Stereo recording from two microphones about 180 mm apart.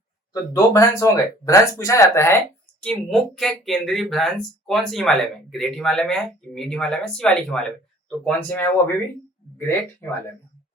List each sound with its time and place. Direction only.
0.5 s speech: 15° left (ahead or behind)
2.8 s speech: 5° left (ahead or behind)